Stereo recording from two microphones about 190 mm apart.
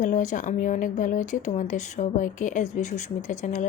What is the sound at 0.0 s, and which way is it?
Speech, 40° left (ahead or behind).